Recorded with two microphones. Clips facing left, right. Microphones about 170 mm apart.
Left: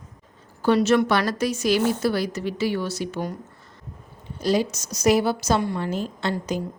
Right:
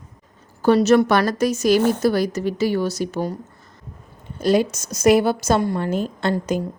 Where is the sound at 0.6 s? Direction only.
40° right (ahead or behind).